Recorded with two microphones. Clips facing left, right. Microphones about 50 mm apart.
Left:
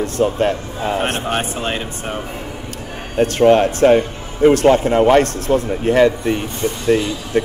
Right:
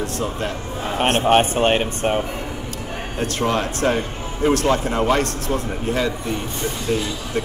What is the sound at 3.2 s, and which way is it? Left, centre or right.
Speech, left.